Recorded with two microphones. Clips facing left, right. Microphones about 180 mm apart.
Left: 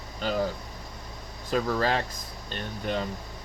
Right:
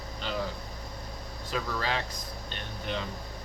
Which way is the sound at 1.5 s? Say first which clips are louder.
Left 6 dB; 45° left (ahead or behind).